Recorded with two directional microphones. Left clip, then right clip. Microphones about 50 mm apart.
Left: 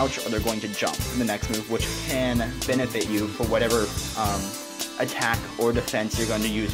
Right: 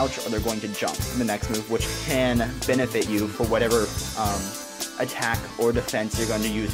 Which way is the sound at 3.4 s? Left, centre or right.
Right.